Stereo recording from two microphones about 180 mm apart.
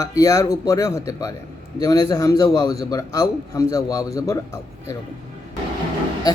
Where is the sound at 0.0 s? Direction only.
20° left (ahead or behind).